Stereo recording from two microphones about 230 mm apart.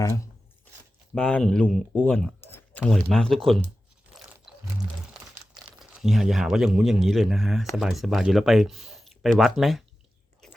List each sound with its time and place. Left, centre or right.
1.1 s speech: centre
5.8 s a man's voice: centre